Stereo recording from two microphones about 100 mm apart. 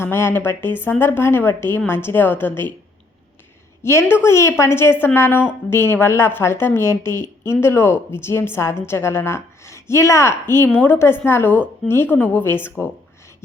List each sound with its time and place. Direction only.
0.0 s a woman's voice: 25° left (ahead or behind)
3.8 s a woman's voice: 25° left (ahead or behind)